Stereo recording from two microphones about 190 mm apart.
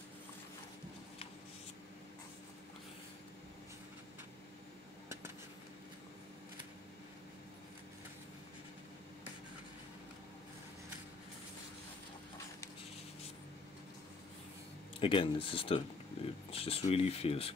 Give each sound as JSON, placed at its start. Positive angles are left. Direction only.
{"t": 15.0, "sound": "speech", "side_deg": 25}